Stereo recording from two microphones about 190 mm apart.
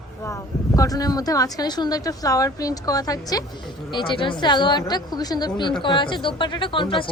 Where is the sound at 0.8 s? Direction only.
20° left (ahead or behind).